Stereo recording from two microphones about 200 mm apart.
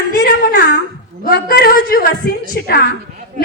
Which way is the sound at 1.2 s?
50° left (ahead or behind).